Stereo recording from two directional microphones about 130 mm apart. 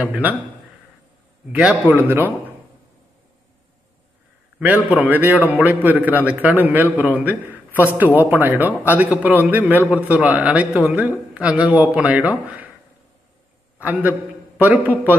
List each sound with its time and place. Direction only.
0.0 s a man's voice: 10° right (ahead or behind)
1.5 s a man's voice: 10° right (ahead or behind)
4.6 s a man's voice: 10° right (ahead or behind)
13.7 s a man's voice: 15° right (ahead or behind)